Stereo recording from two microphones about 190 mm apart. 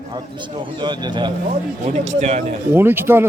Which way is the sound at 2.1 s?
35° right (ahead or behind).